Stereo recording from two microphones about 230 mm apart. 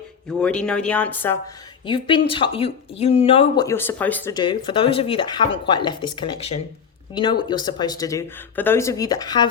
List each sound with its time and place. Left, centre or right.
0.3 s speech: centre
1.9 s speech: left